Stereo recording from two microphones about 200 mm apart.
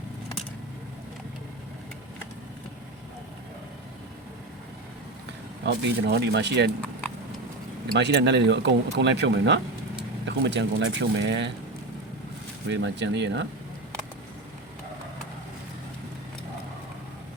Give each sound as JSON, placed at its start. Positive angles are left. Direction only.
{"t": 5.6, "sound": "speech", "side_deg": -60}
{"t": 7.9, "sound": "speech", "side_deg": -60}
{"t": 12.6, "sound": "speech", "side_deg": -65}